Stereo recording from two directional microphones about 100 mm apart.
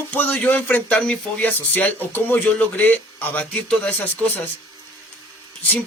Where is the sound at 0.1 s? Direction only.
15° left (ahead or behind).